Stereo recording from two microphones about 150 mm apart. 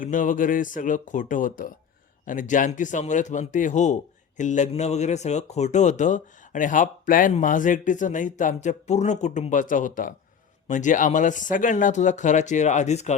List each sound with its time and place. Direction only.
0.0 s speech: 60° left (ahead or behind)